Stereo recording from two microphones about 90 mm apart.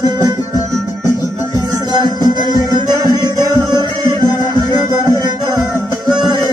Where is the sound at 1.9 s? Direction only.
55° right (ahead or behind).